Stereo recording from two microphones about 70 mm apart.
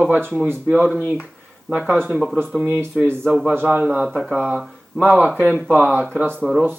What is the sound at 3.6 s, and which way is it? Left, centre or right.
Speech, centre.